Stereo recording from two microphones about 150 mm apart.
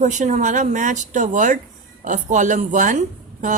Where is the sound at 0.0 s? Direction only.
55° right (ahead or behind).